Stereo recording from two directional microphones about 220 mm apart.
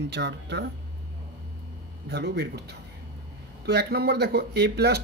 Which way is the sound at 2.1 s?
50° right (ahead or behind).